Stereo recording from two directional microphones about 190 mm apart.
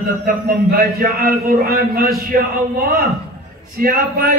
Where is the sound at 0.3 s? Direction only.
50° right (ahead or behind).